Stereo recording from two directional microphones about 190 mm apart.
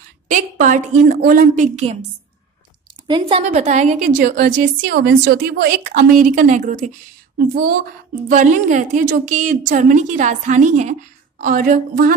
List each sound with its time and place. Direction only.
0.3 s a woman's voice: 45° right (ahead or behind)
3.1 s a woman's voice: 25° right (ahead or behind); by 12.2 s 45° right (ahead or behind)